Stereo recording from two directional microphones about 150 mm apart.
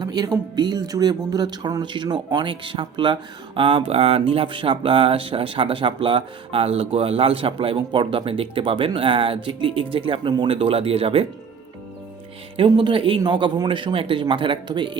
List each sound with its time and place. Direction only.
0.0 s speech: 25° right (ahead or behind)
12.5 s speech: 35° right (ahead or behind)